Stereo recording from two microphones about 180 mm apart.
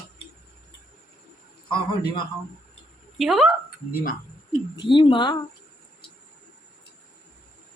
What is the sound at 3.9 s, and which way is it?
Speech, 50° left (ahead or behind).